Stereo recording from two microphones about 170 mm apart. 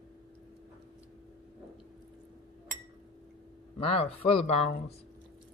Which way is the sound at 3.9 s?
35° left (ahead or behind).